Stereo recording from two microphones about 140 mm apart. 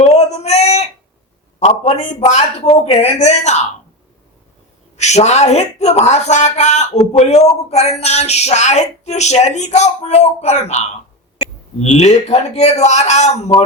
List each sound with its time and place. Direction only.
0.2 s a sound: 50° left (ahead or behind)
1.5 s speech: 50° left (ahead or behind)
4.9 s speech: 55° left (ahead or behind)